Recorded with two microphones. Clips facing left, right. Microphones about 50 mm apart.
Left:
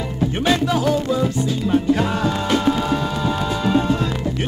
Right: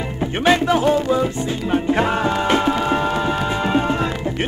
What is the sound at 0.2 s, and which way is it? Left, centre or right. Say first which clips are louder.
Music: right 2 dB; right.